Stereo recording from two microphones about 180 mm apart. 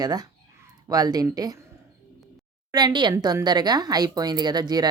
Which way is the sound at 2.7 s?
25° right (ahead or behind).